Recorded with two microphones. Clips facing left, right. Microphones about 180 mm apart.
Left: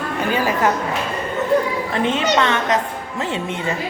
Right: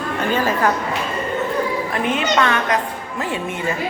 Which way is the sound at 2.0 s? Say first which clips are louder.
Left 1 dB; 25° left (ahead or behind).